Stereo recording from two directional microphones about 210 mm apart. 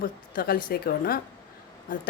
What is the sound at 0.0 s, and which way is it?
Speech, 45° left (ahead or behind).